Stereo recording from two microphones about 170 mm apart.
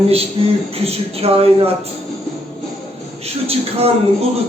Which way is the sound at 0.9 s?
35° right (ahead or behind).